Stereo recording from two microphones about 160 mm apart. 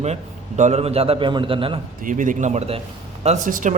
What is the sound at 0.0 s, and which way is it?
A man's voice, 45° right (ahead or behind).